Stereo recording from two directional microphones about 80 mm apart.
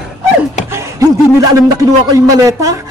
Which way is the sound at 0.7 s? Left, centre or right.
Right.